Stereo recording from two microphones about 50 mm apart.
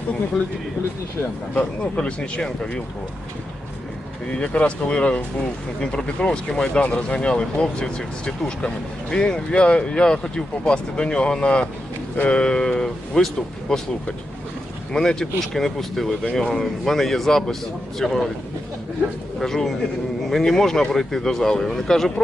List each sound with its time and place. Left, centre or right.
1.5 s speech: left
4.3 s speech: left
14.9 s speech: centre
19.4 s speech: centre